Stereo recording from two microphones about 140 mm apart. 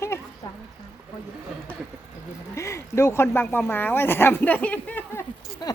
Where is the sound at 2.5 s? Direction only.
20° left (ahead or behind).